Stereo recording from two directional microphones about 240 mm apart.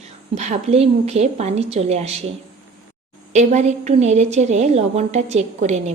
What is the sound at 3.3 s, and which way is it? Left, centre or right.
A woman's voice, right.